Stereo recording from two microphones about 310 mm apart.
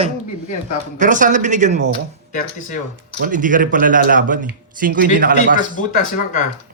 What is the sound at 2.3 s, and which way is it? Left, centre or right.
Speech, left.